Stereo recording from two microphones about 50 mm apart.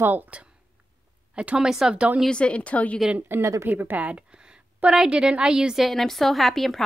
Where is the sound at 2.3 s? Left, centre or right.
Left.